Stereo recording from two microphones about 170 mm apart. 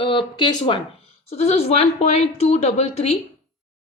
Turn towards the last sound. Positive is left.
turn(degrees=40)  # may be behind; listen again after turning